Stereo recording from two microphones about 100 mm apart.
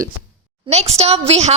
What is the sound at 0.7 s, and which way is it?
Speech, 90° right.